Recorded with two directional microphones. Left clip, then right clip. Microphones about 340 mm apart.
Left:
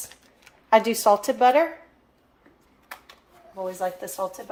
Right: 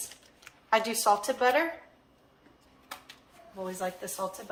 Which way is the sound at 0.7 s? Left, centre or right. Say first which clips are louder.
Left 7 dB; left.